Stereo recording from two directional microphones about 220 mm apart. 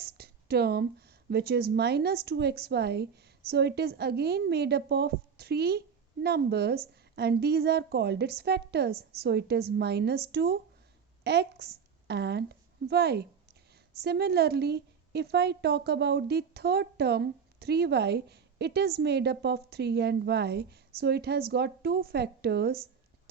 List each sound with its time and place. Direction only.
0.0 s a woman's voice: 45° right (ahead or behind)